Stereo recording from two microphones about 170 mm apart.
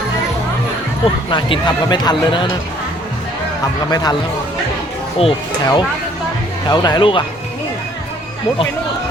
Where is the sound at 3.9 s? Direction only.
25° left (ahead or behind).